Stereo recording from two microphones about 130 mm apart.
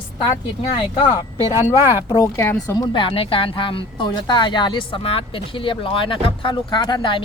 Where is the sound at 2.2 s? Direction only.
25° left (ahead or behind).